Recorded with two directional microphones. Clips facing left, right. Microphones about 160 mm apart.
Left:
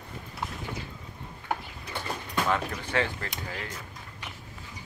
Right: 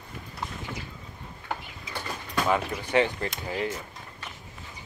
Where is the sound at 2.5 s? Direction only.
15° right (ahead or behind).